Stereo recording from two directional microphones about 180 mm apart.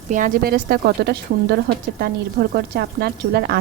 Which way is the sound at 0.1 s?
50° right (ahead or behind).